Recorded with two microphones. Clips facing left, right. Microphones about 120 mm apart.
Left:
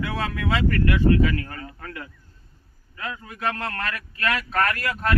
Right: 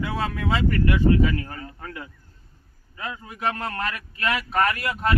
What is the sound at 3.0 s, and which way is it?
Speech, 15° right (ahead or behind).